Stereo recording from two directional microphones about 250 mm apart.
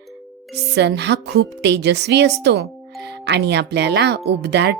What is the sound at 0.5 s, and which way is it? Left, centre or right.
A woman's voice, right.